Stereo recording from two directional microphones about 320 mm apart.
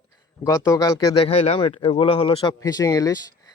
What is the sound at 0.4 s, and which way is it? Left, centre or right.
Speech, centre.